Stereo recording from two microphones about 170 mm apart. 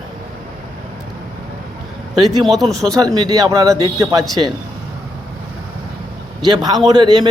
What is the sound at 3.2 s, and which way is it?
A man's voice, 25° right (ahead or behind).